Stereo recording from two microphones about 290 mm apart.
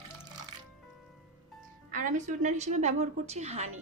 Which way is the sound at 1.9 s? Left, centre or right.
Right.